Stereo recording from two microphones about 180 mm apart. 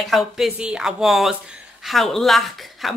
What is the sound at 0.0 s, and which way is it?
Speech, centre (ahead or behind).